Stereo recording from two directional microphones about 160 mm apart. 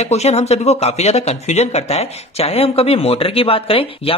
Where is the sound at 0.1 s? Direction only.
40° left (ahead or behind).